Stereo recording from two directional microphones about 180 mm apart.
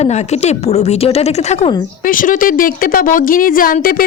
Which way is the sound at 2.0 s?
50° left (ahead or behind).